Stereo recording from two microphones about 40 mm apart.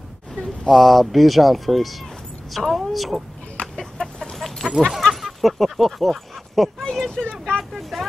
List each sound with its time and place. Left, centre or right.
0.7 s speech: centre
3.7 s chicken: centre
4.8 s speech: centre
5.1 s a sound: centre
6.8 s speech: centre
7.1 s speech: left